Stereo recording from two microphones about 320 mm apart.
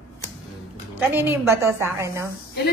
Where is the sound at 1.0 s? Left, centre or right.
Centre.